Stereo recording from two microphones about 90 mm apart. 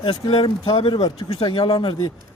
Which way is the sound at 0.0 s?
70° left (ahead or behind).